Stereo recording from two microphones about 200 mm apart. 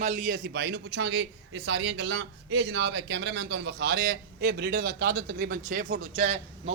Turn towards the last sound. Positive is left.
turn(degrees=-35)  # may be behind; listen again after turning